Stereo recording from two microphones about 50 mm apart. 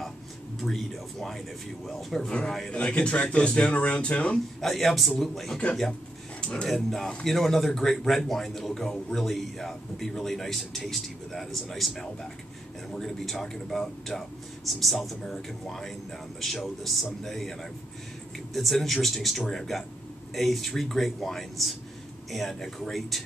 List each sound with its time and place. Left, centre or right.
0.6 s speech: centre
2.7 s a man's voice: left
4.6 s a man's voice: centre
6.4 s speech: centre
6.7 s a man's voice: centre